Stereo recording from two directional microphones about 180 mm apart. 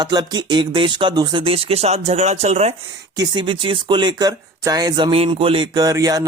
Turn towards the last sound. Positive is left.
turn(degrees=-20)  # may be behind; listen again after turning